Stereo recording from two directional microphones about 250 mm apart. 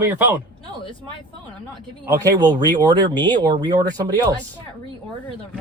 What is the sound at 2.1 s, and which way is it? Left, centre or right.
Speech, centre.